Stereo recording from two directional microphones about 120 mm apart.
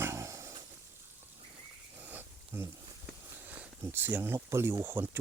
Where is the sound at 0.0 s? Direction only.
25° right (ahead or behind).